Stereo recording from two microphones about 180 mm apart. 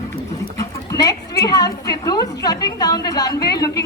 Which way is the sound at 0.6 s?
20° left (ahead or behind).